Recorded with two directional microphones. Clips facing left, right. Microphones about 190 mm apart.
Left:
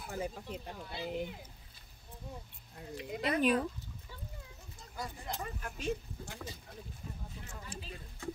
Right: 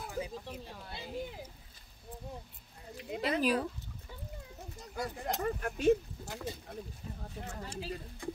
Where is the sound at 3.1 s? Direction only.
25° right (ahead or behind).